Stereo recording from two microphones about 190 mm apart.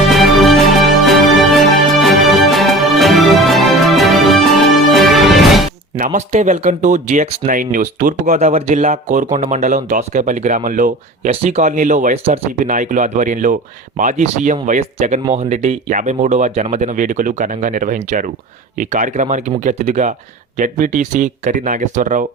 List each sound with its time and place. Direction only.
0.1 s music: centre (ahead or behind)
6.0 s speech: 40° right (ahead or behind)